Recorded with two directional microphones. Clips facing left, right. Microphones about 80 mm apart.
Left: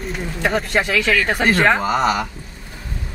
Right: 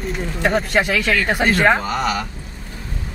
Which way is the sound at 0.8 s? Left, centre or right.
Centre.